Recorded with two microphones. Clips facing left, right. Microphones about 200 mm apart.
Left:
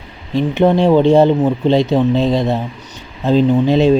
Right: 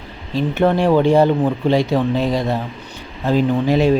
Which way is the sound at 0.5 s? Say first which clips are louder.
Left 3 dB; 15° left (ahead or behind).